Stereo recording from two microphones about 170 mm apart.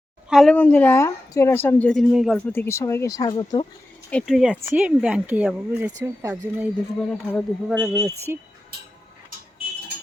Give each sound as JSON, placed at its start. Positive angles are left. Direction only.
{"t": 0.3, "sound": "a woman's voice", "side_deg": 0}
{"t": 2.5, "sound": "a woman's voice", "side_deg": 15}
{"t": 4.1, "sound": "speech", "side_deg": 0}
{"t": 7.1, "sound": "speech", "side_deg": 5}
{"t": 8.0, "sound": "speech", "side_deg": -15}